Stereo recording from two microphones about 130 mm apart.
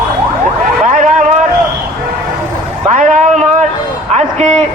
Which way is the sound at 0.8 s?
75° right (ahead or behind).